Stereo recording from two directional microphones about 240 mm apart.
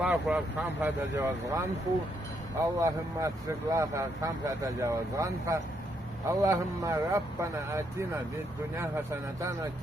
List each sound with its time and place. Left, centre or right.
0.0 s speech: centre
2.7 s speech: centre